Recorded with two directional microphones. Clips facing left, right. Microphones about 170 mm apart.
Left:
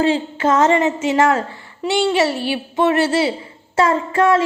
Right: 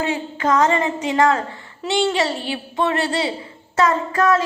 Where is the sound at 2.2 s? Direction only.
20° right (ahead or behind).